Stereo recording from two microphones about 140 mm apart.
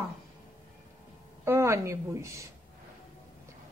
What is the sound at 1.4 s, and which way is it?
A woman's voice, 20° right (ahead or behind).